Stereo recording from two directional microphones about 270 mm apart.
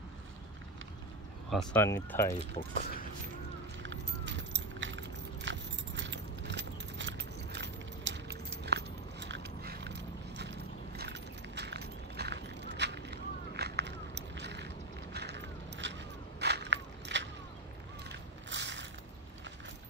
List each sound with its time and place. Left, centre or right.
1.5 s speech: centre
3.8 s keys jangling: right
15.1 s a sound: right